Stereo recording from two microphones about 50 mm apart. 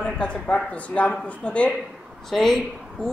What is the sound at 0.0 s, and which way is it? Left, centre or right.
A man's voice, left.